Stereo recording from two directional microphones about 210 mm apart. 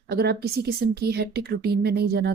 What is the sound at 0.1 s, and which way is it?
Speech, 50° right (ahead or behind).